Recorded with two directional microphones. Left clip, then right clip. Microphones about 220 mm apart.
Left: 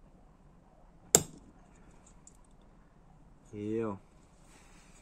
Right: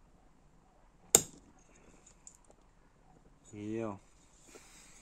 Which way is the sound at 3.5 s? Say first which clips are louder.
Left 4 dB; 25° right (ahead or behind).